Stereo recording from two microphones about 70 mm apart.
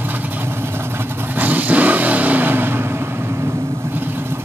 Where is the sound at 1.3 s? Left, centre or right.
Right.